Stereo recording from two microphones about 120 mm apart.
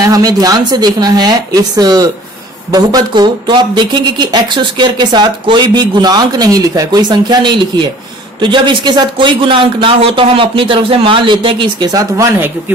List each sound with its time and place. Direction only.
0.0 s speech: 30° right (ahead or behind)
11.9 s speech: 30° right (ahead or behind)